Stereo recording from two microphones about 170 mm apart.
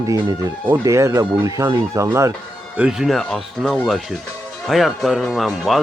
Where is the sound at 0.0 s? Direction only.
20° right (ahead or behind).